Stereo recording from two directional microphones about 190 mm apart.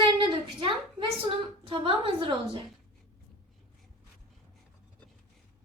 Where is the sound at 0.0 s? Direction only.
25° right (ahead or behind).